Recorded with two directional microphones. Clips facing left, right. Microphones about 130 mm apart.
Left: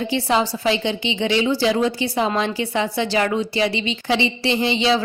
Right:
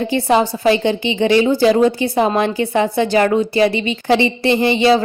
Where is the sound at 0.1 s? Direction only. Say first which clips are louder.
Right 5 dB; 50° right (ahead or behind).